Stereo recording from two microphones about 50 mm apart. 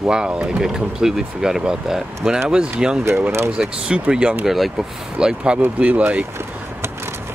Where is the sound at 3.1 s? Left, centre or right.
Right.